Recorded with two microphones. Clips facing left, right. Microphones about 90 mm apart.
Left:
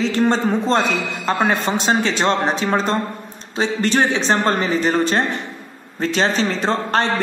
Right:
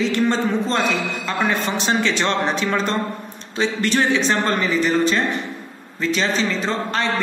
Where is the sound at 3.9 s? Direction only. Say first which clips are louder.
Left 1 dB; 30° left (ahead or behind).